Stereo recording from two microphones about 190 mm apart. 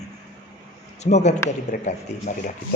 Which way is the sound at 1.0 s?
35° left (ahead or behind).